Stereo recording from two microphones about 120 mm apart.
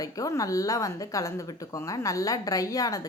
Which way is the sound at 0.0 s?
30° left (ahead or behind).